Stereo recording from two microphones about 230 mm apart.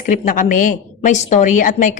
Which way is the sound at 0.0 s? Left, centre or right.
Left.